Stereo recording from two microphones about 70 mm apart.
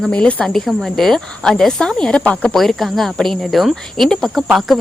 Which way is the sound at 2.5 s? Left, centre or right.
Centre.